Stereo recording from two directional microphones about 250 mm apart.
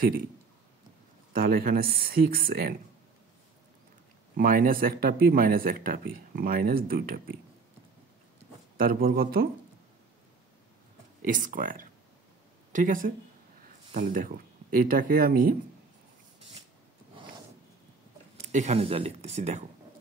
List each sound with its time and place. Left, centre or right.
1.3 s speech: right
4.4 s speech: right
8.7 s speech: right
11.2 s speech: right
18.5 s speech: right